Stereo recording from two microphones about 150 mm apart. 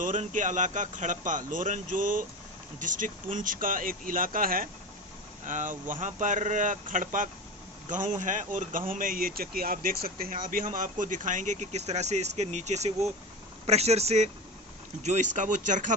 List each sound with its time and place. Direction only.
0.0 s speech: 60° right (ahead or behind)
5.5 s speech: 60° right (ahead or behind)